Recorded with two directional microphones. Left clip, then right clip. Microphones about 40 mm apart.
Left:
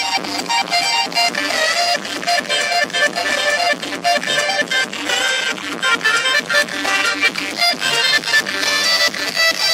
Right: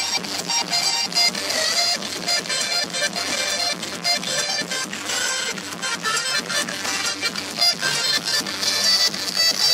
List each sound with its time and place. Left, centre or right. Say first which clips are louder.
0.7 s music: left 3 dB; left